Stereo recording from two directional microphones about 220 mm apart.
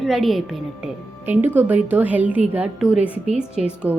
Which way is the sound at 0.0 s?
Centre (ahead or behind).